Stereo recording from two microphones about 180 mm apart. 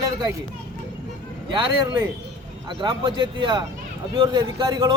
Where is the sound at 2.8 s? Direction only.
25° right (ahead or behind).